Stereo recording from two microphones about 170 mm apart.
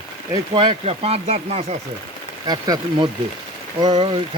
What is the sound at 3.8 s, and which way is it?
Speech, 25° right (ahead or behind).